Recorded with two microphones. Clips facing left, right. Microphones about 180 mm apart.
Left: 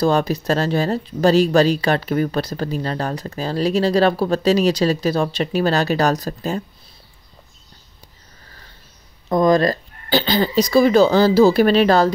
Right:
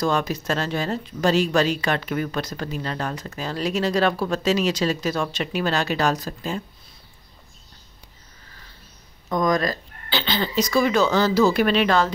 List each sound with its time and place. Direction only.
0.0 s speech: 35° left (ahead or behind)
9.3 s speech: 30° left (ahead or behind)